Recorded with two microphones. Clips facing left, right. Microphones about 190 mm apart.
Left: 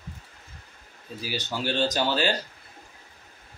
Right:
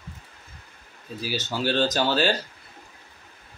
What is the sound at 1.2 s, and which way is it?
Speech, 15° left (ahead or behind).